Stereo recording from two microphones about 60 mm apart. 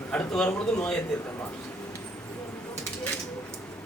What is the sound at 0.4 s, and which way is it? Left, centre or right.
Speech, left.